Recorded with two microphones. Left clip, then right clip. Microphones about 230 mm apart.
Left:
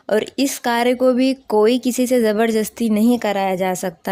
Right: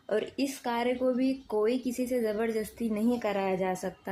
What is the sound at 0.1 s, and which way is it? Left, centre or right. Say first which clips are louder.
Speech: left 12 dB; left.